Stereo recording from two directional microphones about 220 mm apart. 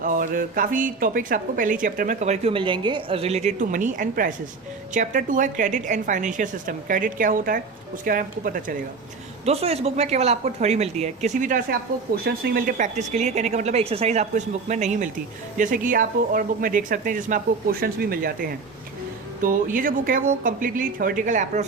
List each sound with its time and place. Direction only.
0.0 s speech: 40° right (ahead or behind)
9.5 s speech: 30° right (ahead or behind)